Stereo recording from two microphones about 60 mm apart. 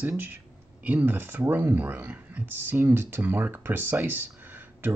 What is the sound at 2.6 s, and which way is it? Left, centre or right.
Speech, right.